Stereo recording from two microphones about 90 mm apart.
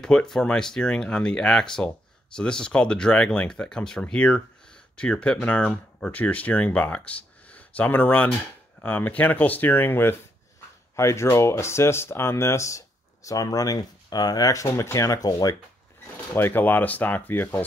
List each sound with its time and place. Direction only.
0.0 s speech: 10° left (ahead or behind); by 15.5 s 45° left (ahead or behind)
16.3 s speech: 20° left (ahead or behind)